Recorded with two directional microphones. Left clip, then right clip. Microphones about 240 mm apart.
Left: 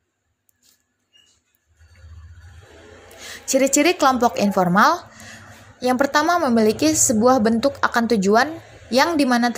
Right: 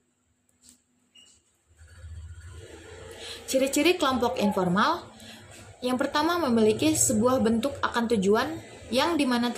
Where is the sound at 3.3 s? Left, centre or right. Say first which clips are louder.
Left 7 dB; left.